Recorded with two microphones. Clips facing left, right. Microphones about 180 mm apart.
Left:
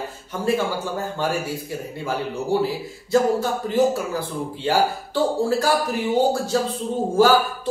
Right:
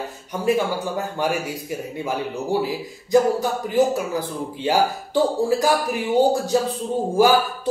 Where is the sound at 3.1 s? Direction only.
15° right (ahead or behind).